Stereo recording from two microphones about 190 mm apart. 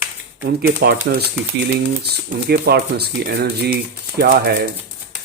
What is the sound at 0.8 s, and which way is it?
Speech, 55° right (ahead or behind).